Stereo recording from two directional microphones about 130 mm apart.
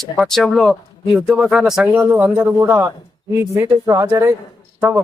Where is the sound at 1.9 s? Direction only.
15° right (ahead or behind).